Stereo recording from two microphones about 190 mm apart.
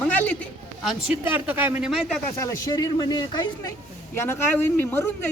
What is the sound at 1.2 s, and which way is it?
Speech, 10° right (ahead or behind).